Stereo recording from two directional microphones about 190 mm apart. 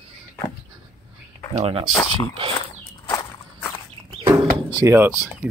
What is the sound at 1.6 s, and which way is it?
Speech, 30° right (ahead or behind).